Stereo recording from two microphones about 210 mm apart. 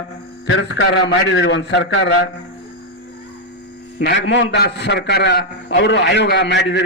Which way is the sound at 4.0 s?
55° left (ahead or behind).